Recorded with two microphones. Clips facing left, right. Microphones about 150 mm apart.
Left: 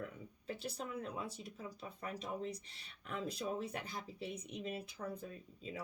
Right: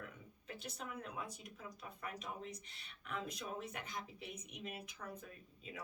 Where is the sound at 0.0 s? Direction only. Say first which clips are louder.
Left 7 dB; 35° left (ahead or behind).